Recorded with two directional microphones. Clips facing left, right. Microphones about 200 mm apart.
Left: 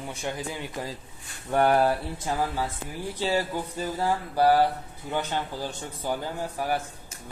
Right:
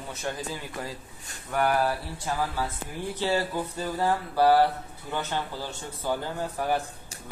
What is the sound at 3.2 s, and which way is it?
Speech, 15° left (ahead or behind).